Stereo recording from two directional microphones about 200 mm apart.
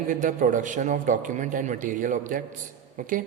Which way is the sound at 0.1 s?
40° right (ahead or behind).